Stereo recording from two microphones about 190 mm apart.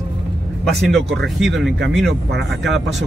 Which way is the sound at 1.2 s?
Centre (ahead or behind).